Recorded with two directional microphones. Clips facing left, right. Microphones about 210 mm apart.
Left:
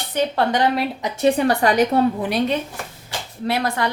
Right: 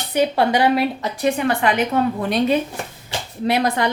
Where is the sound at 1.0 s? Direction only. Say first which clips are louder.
Left 2 dB; 25° left (ahead or behind).